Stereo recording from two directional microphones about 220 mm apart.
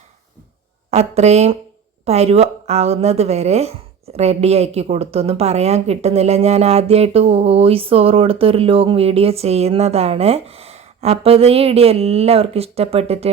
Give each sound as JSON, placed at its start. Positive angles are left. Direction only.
{"t": 0.9, "sound": "a woman's voice", "side_deg": -30}